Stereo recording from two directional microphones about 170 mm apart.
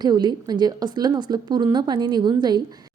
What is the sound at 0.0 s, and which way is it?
Speech, 25° right (ahead or behind).